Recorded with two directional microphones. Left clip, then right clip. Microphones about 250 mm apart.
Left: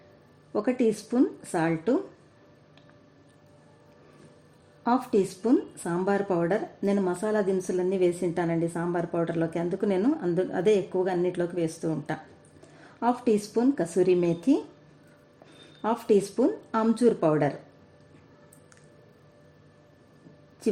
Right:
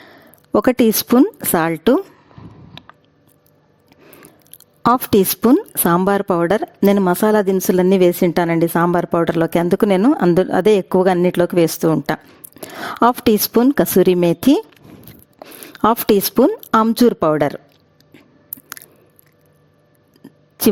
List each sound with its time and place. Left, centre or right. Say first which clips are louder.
0.5 s speech: right 11 dB; right
2.8 s a sound: right 19 dB; right
4.8 s speech: right 11 dB; right
15.8 s speech: right 10 dB; right